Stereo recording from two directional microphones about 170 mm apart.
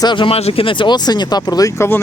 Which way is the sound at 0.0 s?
30° left (ahead or behind).